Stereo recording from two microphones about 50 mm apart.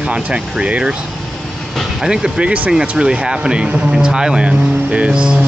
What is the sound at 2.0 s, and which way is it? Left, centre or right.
Speech, centre.